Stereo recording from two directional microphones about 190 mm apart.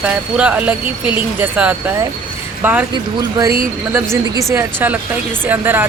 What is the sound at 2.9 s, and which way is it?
Speech, 20° right (ahead or behind).